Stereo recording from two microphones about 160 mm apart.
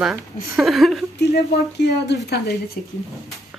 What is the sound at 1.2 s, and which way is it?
Speech, 90° left.